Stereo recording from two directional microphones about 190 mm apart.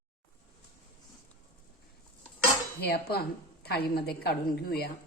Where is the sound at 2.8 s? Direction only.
55° left (ahead or behind).